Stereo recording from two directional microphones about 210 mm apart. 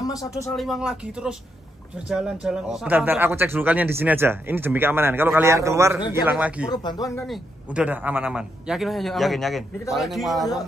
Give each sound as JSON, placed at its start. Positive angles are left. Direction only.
{"t": 0.0, "sound": "speech", "side_deg": 15}
{"t": 0.5, "sound": "a man's voice", "side_deg": 0}
{"t": 6.7, "sound": "speech", "side_deg": 20}
{"t": 7.2, "sound": "a man's voice", "side_deg": -5}